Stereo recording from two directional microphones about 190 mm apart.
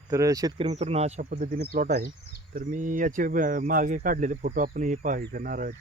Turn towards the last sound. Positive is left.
turn(degrees=-45)  # may be behind; listen again after turning